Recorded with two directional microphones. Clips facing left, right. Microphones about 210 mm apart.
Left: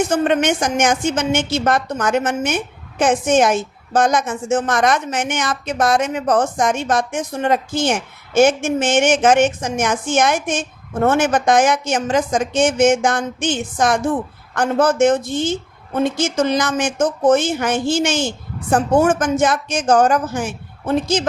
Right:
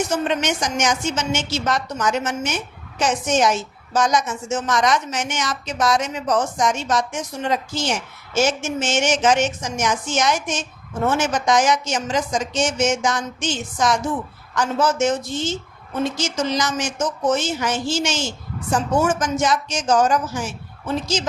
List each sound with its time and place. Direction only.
0.0 s a woman's voice: 55° left (ahead or behind)